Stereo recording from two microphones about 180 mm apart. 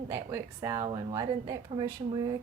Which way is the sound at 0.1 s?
15° right (ahead or behind).